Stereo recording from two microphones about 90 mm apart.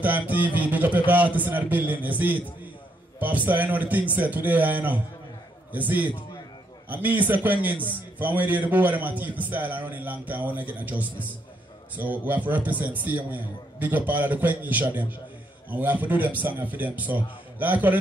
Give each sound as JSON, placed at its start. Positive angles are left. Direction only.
{"t": 0.0, "sound": "a man's voice", "side_deg": -20}